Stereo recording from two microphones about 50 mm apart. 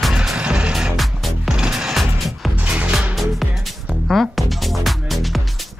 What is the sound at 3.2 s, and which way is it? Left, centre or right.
Music, centre.